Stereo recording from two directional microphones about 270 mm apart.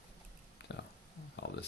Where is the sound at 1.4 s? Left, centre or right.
Left.